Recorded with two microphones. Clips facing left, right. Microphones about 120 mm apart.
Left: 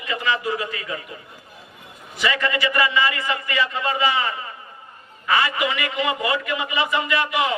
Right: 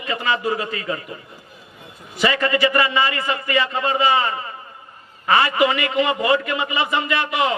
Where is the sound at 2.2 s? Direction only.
35° right (ahead or behind).